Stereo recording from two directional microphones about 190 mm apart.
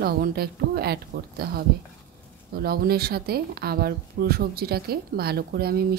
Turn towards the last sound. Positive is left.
turn(degrees=-55)  # may be behind; listen again after turning